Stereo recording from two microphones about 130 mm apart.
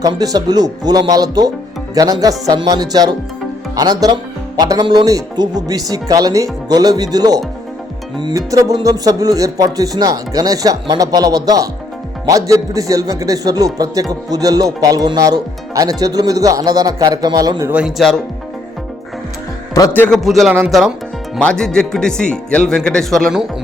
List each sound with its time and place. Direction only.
0.0 s speech: 30° right (ahead or behind)
17.7 s speech: 10° right (ahead or behind)
20.1 s speech: centre (ahead or behind)